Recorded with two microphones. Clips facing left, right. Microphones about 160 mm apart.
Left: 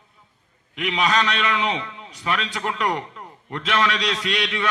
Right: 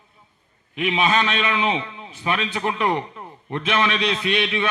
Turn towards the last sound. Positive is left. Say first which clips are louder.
# right 3 dB
turn(degrees=-20)  # may be behind; listen again after turning